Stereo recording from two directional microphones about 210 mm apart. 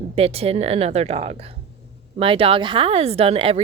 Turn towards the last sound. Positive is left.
turn(degrees=-25)  # may be behind; listen again after turning